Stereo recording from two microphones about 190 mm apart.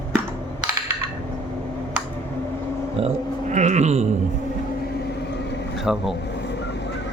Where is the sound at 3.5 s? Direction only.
40° right (ahead or behind).